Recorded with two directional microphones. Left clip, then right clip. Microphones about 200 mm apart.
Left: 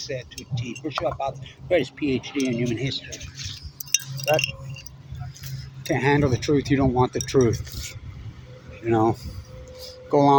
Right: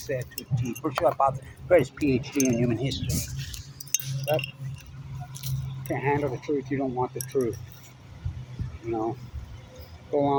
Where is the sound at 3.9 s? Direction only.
55° left (ahead or behind).